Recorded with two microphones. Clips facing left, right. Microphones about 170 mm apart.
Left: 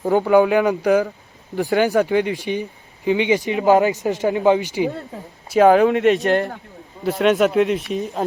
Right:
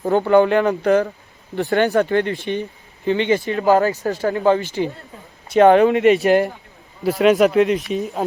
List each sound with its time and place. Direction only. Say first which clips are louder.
0.1 s speech: even; 10° left (ahead or behind)